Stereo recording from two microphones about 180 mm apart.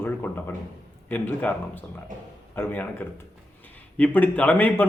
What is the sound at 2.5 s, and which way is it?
A man's voice, 10° left (ahead or behind).